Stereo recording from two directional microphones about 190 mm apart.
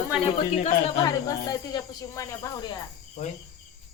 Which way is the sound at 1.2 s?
20° left (ahead or behind).